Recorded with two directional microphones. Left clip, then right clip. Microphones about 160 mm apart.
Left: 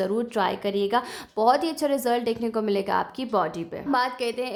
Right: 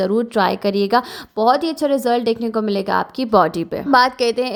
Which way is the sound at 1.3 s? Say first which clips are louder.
Right 5 dB; 25° right (ahead or behind).